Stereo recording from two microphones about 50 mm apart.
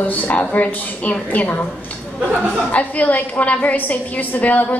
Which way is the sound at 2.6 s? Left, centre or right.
Left.